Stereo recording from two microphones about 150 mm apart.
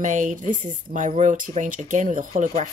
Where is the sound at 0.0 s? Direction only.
55° right (ahead or behind).